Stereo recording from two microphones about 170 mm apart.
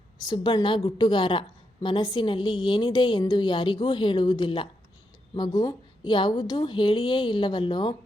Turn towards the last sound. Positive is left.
turn(degrees=30)  # may be behind; listen again after turning